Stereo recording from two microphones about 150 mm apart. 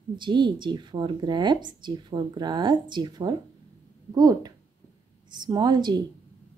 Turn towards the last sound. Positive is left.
turn(degrees=-30)  # may be behind; listen again after turning